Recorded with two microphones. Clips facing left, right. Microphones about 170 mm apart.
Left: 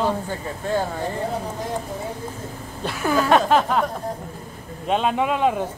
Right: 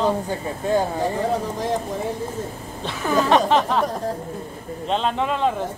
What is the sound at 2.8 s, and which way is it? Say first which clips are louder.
Speech: even; 10° left (ahead or behind).